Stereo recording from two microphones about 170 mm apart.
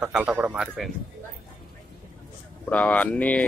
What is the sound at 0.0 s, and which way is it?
Speech, 10° right (ahead or behind).